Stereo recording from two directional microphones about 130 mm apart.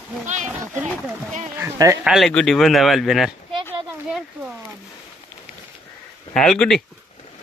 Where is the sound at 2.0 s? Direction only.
Centre (ahead or behind).